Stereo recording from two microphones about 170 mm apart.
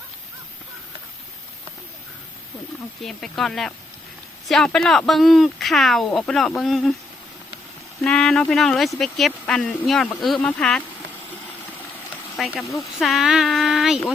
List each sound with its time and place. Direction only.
3.0 s speech: centre (ahead or behind)
8.0 s speech: 5° left (ahead or behind)
12.4 s speech: centre (ahead or behind)